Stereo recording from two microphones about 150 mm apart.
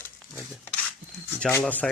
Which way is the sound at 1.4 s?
10° left (ahead or behind).